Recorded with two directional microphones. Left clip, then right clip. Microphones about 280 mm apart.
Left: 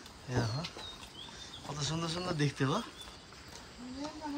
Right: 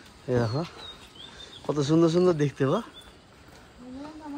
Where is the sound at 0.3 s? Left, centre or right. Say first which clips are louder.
Right 10 dB; centre.